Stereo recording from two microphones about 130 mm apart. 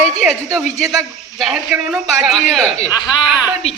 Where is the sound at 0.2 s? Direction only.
5° right (ahead or behind).